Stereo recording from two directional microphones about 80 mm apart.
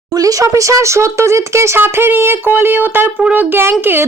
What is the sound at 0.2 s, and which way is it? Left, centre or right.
A woman's voice, right.